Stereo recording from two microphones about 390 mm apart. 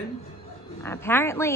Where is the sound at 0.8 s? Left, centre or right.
Centre.